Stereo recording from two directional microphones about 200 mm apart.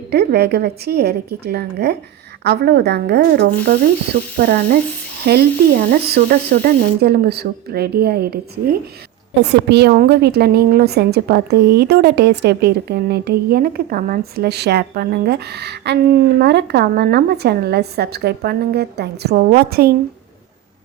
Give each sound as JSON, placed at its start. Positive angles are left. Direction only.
{"t": 0.1, "sound": "a woman's voice", "side_deg": -55}